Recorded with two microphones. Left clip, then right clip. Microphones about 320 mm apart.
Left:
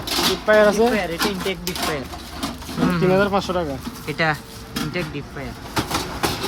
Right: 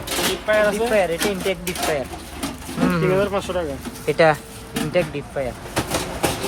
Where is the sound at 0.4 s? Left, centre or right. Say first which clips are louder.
Left 4 dB; left.